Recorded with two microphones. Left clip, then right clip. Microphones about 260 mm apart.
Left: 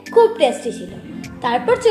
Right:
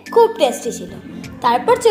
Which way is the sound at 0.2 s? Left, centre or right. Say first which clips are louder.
Even; right.